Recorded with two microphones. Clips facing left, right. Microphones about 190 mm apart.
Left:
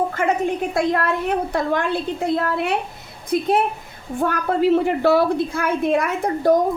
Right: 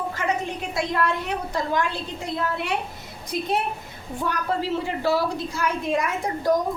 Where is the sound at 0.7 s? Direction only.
50° left (ahead or behind).